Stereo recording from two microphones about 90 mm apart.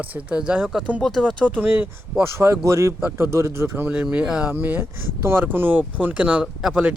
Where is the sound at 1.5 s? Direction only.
15° right (ahead or behind).